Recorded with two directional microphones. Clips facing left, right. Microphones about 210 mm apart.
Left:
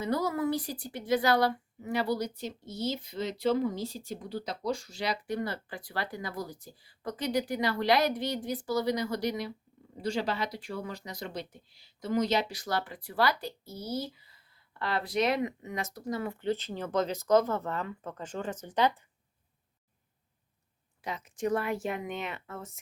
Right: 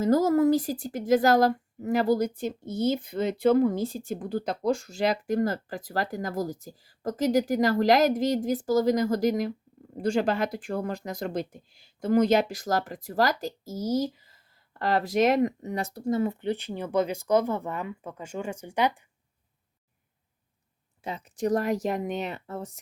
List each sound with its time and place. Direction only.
0.0 s a woman's voice: 45° right (ahead or behind); by 19.0 s 10° right (ahead or behind)
21.0 s speech: 30° right (ahead or behind)